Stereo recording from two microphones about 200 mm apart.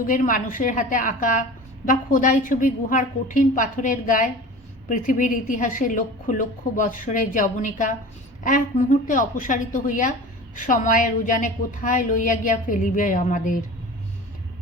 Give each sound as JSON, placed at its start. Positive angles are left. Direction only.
{"t": 0.1, "sound": "a woman's voice", "side_deg": 40}